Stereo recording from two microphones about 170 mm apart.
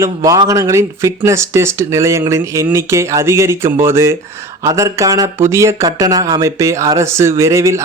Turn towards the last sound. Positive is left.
turn(degrees=-20)  # may be behind; listen again after turning